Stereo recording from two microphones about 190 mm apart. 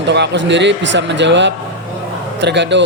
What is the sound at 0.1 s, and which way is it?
A man's voice, 65° right (ahead or behind).